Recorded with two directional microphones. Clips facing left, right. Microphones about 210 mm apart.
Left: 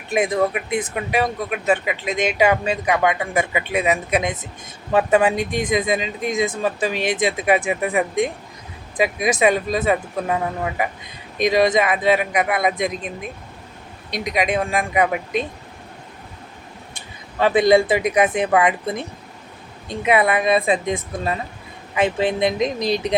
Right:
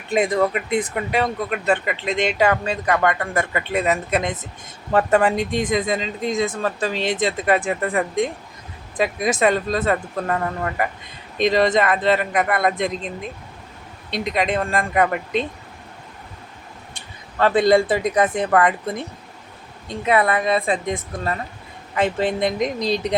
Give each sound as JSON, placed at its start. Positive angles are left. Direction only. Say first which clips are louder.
{"t": 0.1, "sound": "speech", "louder": "even", "side_deg": 10}
{"t": 14.1, "sound": "speech", "louder": "even", "side_deg": 15}
{"t": 17.4, "sound": "speech", "louder": "left 1 dB", "side_deg": 15}